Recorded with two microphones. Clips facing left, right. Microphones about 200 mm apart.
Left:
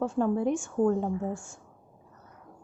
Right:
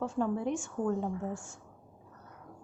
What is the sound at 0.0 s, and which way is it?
Speech, 50° left (ahead or behind).